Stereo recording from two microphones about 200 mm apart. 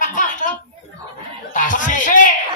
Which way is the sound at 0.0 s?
40° left (ahead or behind).